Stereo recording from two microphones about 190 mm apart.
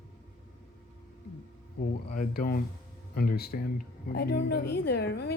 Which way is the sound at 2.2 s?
50° left (ahead or behind).